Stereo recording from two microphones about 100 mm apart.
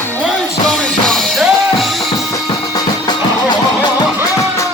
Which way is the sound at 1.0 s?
5° left (ahead or behind).